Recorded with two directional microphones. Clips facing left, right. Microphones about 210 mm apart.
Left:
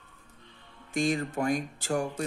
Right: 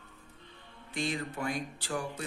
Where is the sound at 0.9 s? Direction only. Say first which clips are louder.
Left 7 dB; 45° left (ahead or behind).